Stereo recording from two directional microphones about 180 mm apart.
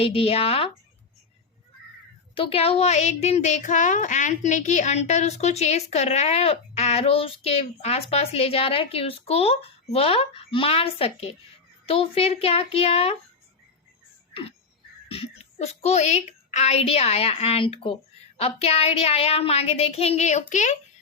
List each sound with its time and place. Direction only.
0.0 s speech: 35° left (ahead or behind)
2.3 s speech: 30° left (ahead or behind)
15.1 s a woman's voice: 35° left (ahead or behind)